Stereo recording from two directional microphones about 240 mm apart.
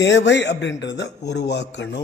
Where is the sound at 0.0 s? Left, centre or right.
Left.